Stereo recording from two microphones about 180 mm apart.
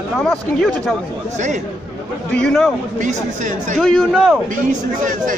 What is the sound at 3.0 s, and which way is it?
Speech, 45° right (ahead or behind).